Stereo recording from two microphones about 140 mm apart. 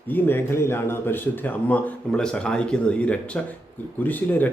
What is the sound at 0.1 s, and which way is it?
Speech, 15° left (ahead or behind).